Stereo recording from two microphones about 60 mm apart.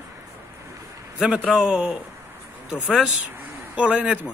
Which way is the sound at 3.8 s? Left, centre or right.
Right.